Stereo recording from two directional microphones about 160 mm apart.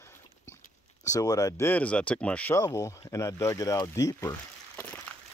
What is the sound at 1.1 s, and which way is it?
Speech, 20° left (ahead or behind).